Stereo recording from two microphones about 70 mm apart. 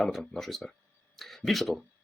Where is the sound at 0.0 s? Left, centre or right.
Centre.